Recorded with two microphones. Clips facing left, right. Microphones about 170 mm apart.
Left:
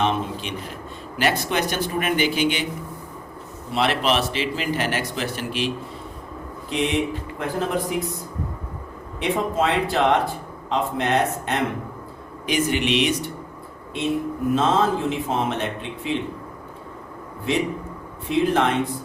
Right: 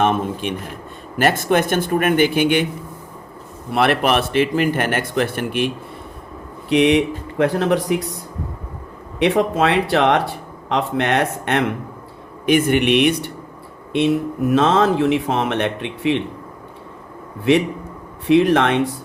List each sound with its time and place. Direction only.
0.0 s speech: 50° right (ahead or behind)
3.7 s a man's voice: 60° right (ahead or behind)
6.7 s speech: 70° right (ahead or behind)
9.1 s speech: 70° right (ahead or behind)
12.5 s a man's voice: 55° right (ahead or behind)
13.9 s speech: 75° right (ahead or behind)
18.3 s speech: 70° right (ahead or behind)